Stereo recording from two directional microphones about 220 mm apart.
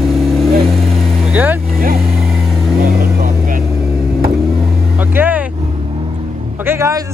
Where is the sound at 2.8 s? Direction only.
40° right (ahead or behind).